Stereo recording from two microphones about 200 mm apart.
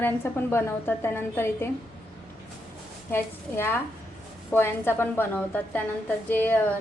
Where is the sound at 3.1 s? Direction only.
10° left (ahead or behind).